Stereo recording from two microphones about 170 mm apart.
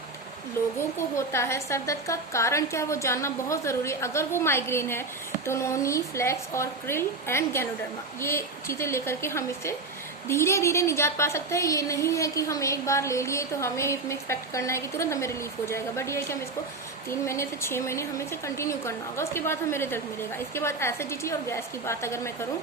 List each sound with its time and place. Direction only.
0.8 s a woman's voice: 15° left (ahead or behind)